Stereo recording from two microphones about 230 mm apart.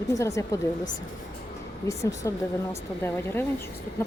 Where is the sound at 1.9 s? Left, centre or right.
Centre.